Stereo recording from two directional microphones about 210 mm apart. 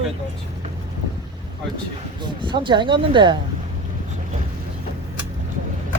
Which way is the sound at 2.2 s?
20° right (ahead or behind).